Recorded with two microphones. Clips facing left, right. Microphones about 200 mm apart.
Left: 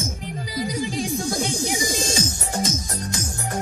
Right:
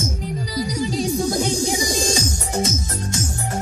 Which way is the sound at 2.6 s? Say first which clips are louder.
Right 2 dB; 25° right (ahead or behind).